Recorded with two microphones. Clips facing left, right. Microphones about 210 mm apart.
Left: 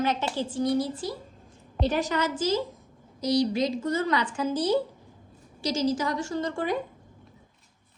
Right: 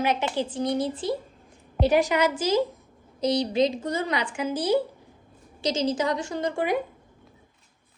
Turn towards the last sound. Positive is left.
turn(degrees=-15)  # may be behind; listen again after turning